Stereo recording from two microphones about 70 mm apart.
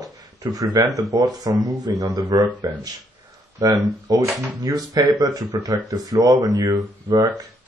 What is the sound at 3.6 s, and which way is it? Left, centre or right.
Speech, right.